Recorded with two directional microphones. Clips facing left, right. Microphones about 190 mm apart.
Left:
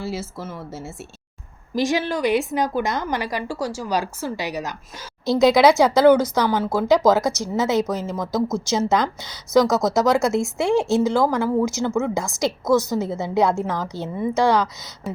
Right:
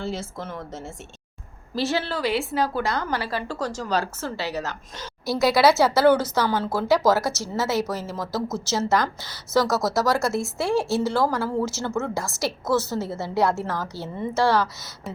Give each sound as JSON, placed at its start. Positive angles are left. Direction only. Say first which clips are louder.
{"t": 0.0, "sound": "a woman's voice", "louder": "left 1 dB", "side_deg": 5}
{"t": 8.4, "sound": "speech", "louder": "left 6 dB", "side_deg": -5}
{"t": 8.6, "sound": "a woman's voice", "louder": "left 3 dB", "side_deg": 15}